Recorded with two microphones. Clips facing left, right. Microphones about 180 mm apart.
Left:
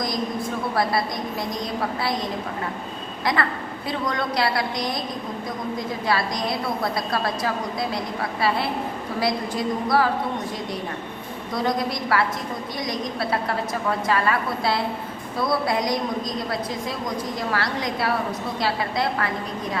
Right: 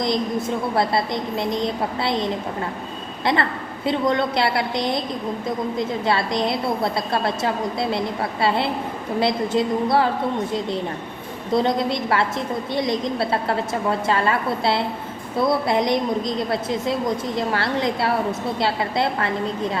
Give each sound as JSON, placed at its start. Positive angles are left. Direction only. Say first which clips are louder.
{"t": 0.0, "sound": "a woman's voice", "louder": "right 4 dB", "side_deg": -25}
{"t": 3.3, "sound": "a woman's voice", "louder": "right 3 dB", "side_deg": -25}
{"t": 6.1, "sound": "a woman's voice", "louder": "right 2 dB", "side_deg": -25}
{"t": 11.5, "sound": "a woman's voice", "louder": "right 5 dB", "side_deg": -25}